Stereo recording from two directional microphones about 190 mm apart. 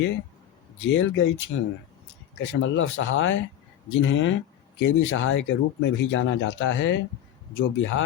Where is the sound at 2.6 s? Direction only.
90° left.